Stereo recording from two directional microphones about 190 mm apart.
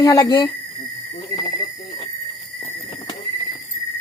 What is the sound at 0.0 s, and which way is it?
Speech, 20° left (ahead or behind).